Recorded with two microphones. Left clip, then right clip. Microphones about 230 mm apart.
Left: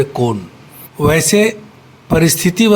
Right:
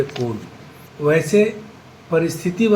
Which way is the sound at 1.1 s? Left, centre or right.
Left.